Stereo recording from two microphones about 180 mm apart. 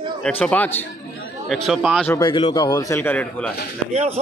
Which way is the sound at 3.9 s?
35° right (ahead or behind).